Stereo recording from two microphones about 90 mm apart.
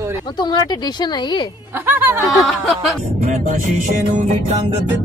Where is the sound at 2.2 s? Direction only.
Centre (ahead or behind).